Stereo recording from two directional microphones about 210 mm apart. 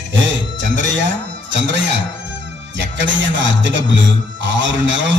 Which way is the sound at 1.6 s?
60° right (ahead or behind).